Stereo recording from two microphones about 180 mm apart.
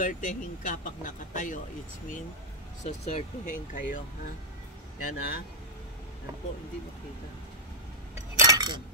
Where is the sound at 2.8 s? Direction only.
40° left (ahead or behind).